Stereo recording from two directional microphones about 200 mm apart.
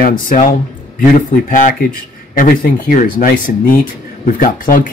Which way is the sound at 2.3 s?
45° left (ahead or behind).